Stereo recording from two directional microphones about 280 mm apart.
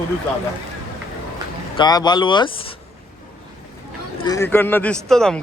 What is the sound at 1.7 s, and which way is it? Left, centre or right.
Speech, centre.